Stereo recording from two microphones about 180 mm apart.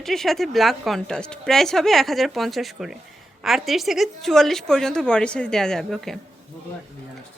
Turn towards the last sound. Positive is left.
turn(degrees=0)  # may be behind; listen again after turning